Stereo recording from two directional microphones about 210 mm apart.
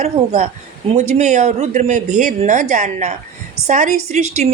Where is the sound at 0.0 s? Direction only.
30° right (ahead or behind).